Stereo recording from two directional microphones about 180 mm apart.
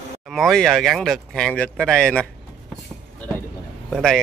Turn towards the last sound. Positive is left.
turn(degrees=0)  # may be behind; listen again after turning